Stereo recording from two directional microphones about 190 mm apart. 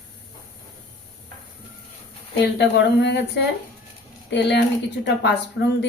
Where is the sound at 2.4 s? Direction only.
65° left (ahead or behind).